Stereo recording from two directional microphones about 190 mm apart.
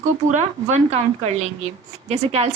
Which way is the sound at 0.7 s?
35° right (ahead or behind).